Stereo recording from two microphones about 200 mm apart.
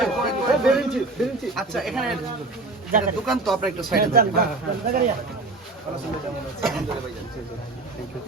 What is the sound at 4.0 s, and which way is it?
Speech, 50° right (ahead or behind).